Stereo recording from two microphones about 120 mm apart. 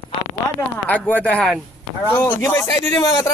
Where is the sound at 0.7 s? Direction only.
10° left (ahead or behind).